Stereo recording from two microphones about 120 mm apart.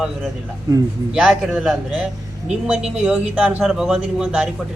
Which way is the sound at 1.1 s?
5° right (ahead or behind).